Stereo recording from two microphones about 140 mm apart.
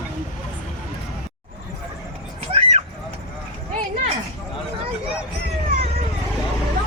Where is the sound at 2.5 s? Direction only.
45° right (ahead or behind).